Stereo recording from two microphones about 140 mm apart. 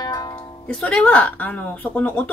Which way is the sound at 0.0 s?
30° left (ahead or behind).